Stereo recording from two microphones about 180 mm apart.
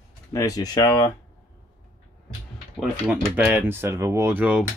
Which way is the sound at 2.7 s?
5° right (ahead or behind).